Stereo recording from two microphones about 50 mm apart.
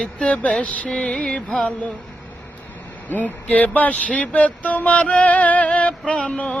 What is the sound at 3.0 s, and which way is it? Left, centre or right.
Speech, left.